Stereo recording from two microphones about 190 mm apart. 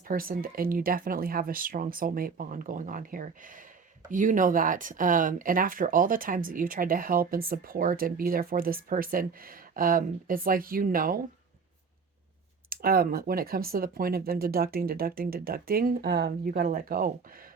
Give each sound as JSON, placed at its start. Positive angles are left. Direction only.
{"t": 0.1, "sound": "speech", "side_deg": -50}
{"t": 12.7, "sound": "speech", "side_deg": -50}